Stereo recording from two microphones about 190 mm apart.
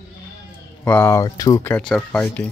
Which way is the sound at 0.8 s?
10° left (ahead or behind).